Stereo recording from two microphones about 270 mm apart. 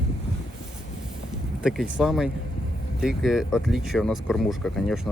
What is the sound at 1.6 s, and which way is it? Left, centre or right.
Speech, centre.